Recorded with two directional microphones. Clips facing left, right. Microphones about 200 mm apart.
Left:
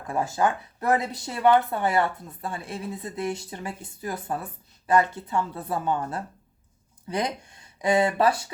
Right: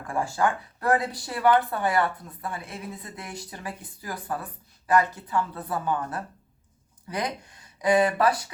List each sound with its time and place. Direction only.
0.1 s speech: 20° left (ahead or behind)